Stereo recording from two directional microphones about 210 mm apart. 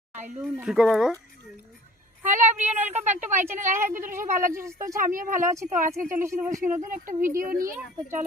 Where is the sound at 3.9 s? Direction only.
40° right (ahead or behind).